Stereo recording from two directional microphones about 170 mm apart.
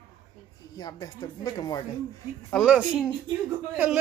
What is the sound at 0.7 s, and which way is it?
Speech, 25° left (ahead or behind).